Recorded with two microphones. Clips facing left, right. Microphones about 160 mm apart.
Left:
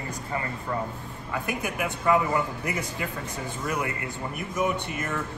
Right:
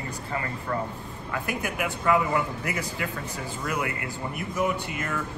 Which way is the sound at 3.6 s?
30° left (ahead or behind).